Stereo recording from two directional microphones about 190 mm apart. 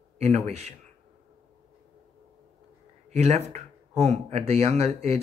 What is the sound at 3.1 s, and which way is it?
Speech, 35° right (ahead or behind).